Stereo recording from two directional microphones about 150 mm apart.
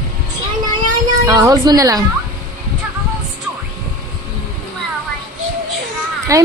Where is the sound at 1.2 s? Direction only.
25° right (ahead or behind).